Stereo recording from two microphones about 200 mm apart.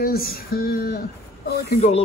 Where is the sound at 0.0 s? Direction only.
50° left (ahead or behind).